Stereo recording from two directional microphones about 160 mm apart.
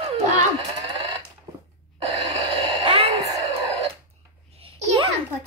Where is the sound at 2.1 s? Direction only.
30° right (ahead or behind).